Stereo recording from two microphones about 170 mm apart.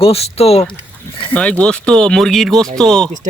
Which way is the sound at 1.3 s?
5° left (ahead or behind).